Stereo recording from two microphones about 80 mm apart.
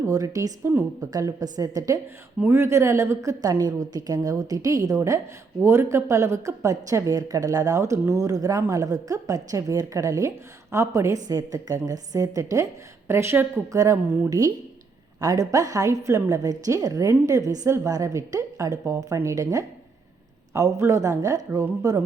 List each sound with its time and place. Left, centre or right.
0.0 s a woman's voice: right
2.5 s a woman's voice: right
5.6 s a woman's voice: right
13.7 s a woman's voice: right